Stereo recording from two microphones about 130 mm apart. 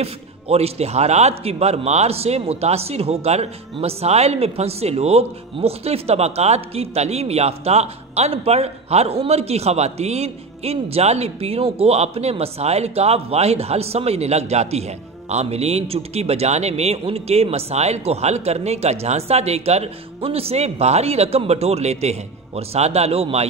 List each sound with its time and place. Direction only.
0.0 s a man's voice: 50° right (ahead or behind)